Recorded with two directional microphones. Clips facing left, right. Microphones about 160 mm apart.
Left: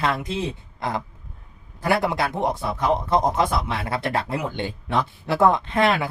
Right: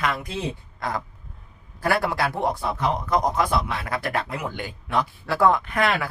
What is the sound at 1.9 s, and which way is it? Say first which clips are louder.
Speech: left 1 dB; 20° left (ahead or behind).